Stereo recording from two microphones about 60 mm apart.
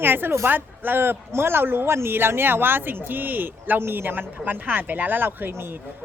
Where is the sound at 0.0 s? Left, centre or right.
Right.